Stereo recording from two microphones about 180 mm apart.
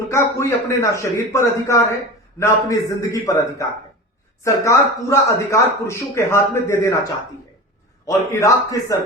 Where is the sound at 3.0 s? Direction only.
20° left (ahead or behind).